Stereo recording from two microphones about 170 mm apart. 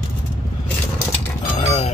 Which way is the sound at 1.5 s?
40° left (ahead or behind).